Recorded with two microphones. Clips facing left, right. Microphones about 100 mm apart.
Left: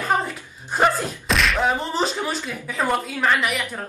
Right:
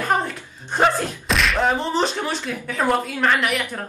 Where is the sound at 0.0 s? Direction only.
Centre (ahead or behind).